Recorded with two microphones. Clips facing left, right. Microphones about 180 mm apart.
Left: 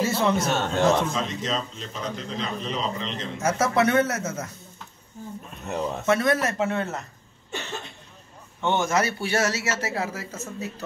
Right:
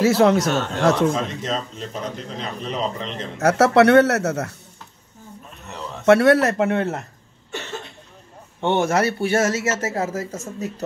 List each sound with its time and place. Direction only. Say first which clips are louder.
0.0 s speech: right 7 dB; 85° right
1.0 s a man's voice: right 6 dB; 50° right (ahead or behind); by 4.6 s 70° right (ahead or behind)
6.0 s a man's voice: right 9 dB; 70° right (ahead or behind)
8.5 s a man's voice: right 4 dB; 65° right (ahead or behind); by 10.7 s 45° right (ahead or behind)